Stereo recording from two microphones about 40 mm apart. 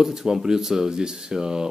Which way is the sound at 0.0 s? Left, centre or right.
Centre.